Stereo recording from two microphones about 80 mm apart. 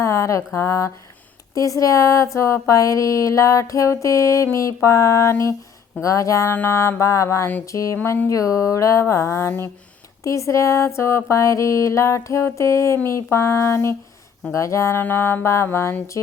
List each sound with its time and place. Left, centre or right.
0.0 s speech: left
6.5 s speech: left
15.0 s speech: left